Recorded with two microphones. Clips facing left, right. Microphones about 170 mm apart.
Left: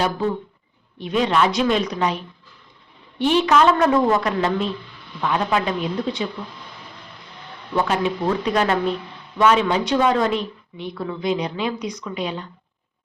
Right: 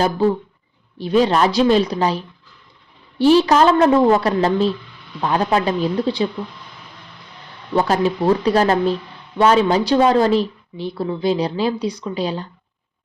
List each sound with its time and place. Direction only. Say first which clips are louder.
0.9 s speech: right 4 dB; 35° right (ahead or behind)
7.8 s speech: right 4 dB; 35° right (ahead or behind)